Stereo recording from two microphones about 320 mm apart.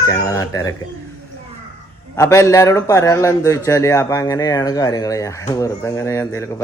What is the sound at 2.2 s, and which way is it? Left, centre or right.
Speech, centre.